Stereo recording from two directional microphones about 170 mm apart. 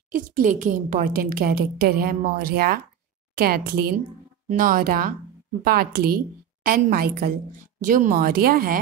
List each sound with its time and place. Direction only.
0.1 s a woman's voice: 50° right (ahead or behind)
7.8 s a woman's voice: 50° right (ahead or behind)